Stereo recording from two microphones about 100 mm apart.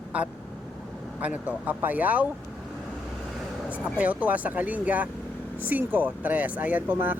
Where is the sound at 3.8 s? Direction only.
15° right (ahead or behind).